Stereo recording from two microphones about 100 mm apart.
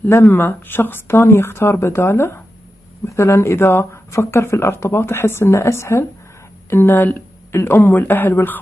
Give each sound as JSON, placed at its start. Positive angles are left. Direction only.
{"t": 0.0, "sound": "speech", "side_deg": 25}